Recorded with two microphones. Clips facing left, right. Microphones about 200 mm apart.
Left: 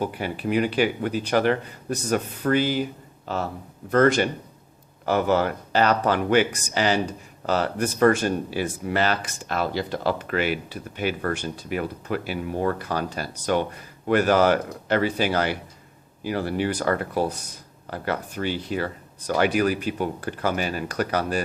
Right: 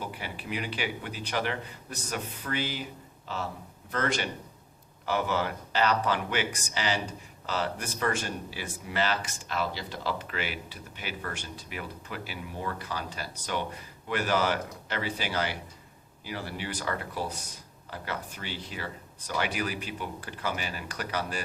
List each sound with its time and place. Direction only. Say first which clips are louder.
0.0 s speech: left 11 dB; 50° left (ahead or behind)
3.9 s speech: left 12 dB; 50° left (ahead or behind)